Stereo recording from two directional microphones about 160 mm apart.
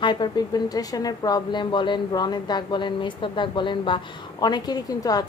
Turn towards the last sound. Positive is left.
turn(degrees=25)  # may be behind; listen again after turning